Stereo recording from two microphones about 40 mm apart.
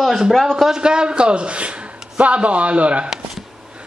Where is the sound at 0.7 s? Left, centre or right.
Right.